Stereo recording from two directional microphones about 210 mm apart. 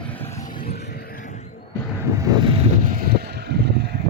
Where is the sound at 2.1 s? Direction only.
15° right (ahead or behind); by 4.0 s 50° right (ahead or behind).